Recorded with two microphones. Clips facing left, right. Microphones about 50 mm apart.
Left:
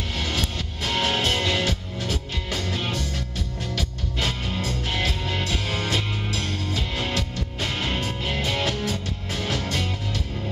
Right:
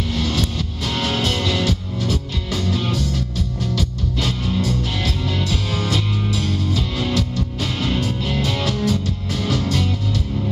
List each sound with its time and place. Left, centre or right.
0.1 s music: left